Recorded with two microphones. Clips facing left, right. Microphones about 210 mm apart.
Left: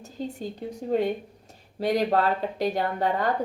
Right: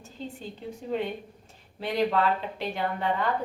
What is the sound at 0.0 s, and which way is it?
A woman's voice, 40° left (ahead or behind).